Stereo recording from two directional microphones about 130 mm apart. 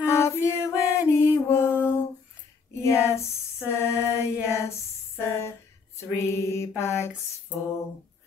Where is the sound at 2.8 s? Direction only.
20° left (ahead or behind).